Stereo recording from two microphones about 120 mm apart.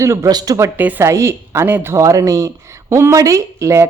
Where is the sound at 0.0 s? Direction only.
25° right (ahead or behind).